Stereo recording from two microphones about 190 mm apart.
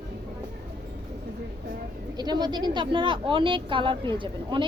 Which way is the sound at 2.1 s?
20° right (ahead or behind).